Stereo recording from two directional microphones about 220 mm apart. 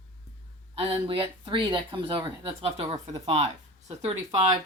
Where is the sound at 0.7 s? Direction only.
25° right (ahead or behind).